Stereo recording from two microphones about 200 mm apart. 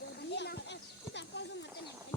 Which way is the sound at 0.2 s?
55° left (ahead or behind).